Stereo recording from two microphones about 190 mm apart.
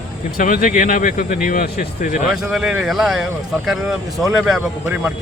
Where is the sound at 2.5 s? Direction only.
Centre (ahead or behind).